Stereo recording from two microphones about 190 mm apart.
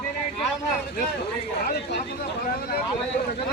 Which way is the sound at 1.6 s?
60° left (ahead or behind).